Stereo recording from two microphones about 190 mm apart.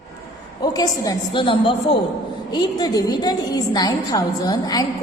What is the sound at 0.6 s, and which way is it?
A woman's voice, 20° left (ahead or behind).